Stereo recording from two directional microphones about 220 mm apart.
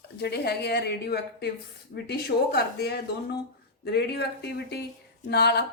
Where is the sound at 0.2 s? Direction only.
45° left (ahead or behind).